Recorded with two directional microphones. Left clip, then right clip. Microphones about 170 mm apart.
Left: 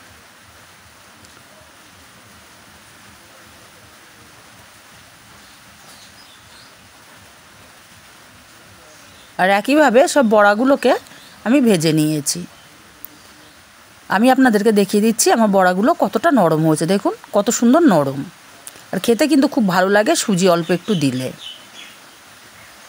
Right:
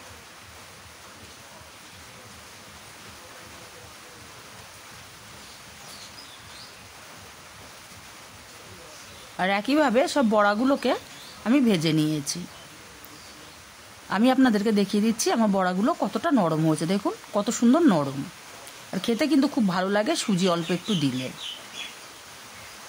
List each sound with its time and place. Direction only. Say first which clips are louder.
9.4 s speech: left 9 dB; 40° left (ahead or behind)
14.0 s speech: left 8 dB; 40° left (ahead or behind)